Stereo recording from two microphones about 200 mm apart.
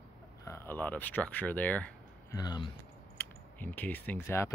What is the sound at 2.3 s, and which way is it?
Speech, 20° left (ahead or behind).